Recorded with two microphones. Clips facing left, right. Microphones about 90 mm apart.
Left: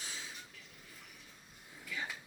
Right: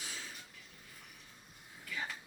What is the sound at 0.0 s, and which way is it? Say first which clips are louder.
Vehicle: even; 20° left (ahead or behind).